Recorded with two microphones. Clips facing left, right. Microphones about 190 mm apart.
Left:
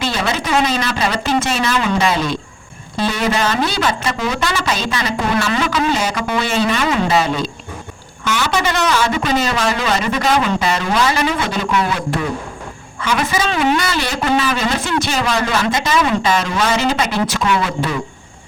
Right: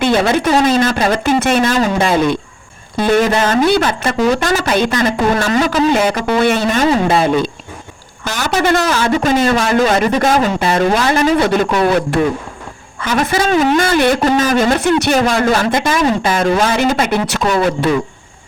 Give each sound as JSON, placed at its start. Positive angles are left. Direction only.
{"t": 0.0, "sound": "a man's voice", "side_deg": -55}
{"t": 8.2, "sound": "a man's voice", "side_deg": -40}
{"t": 12.2, "sound": "speech", "side_deg": -35}
{"t": 13.0, "sound": "a man's voice", "side_deg": -50}
{"t": 14.3, "sound": "a man's voice", "side_deg": -45}
{"t": 17.4, "sound": "speech", "side_deg": -40}